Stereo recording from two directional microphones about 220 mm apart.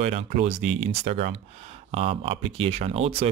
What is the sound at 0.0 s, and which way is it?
Speech, 30° right (ahead or behind).